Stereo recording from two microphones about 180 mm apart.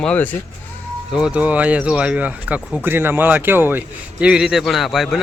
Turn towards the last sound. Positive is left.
turn(degrees=0)  # may be behind; listen again after turning